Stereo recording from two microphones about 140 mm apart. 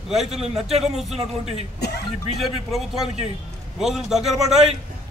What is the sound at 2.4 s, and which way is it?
A man's voice, centre (ahead or behind).